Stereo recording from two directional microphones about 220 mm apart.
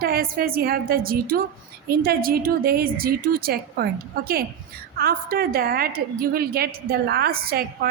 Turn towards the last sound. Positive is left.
turn(degrees=-45)  # may be behind; listen again after turning